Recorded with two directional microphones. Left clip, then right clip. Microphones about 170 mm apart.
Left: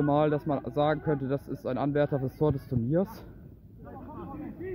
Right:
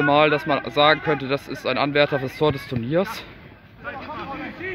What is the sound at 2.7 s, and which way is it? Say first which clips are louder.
Speech: right 7 dB; 10° left (ahead or behind).